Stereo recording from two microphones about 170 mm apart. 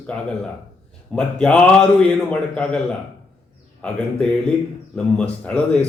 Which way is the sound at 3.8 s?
5° left (ahead or behind).